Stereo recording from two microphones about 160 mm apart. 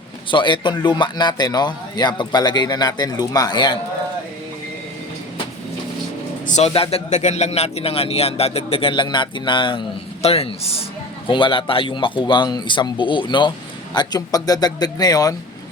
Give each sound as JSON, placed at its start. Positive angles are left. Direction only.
{"t": 0.3, "sound": "a man's voice", "side_deg": 30}
{"t": 6.5, "sound": "a man's voice", "side_deg": 40}